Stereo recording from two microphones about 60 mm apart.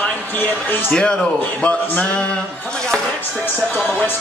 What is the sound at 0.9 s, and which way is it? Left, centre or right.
Speech, centre.